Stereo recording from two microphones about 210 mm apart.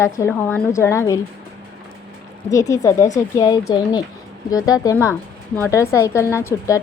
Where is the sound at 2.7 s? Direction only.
15° left (ahead or behind).